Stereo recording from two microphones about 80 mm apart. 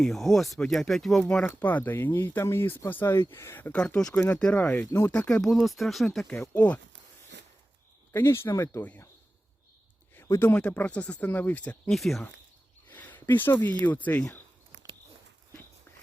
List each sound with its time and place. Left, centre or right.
0.0 s speech: centre
1.5 s speech: left
3.8 s speech: centre
4.4 s speech: centre
6.5 s speech: centre
8.1 s speech: left
8.5 s speech: left
10.5 s speech: centre
11.9 s speech: centre
12.9 s speech: left